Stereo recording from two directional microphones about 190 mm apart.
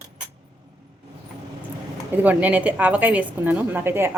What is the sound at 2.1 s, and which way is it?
A woman's voice, 10° right (ahead or behind).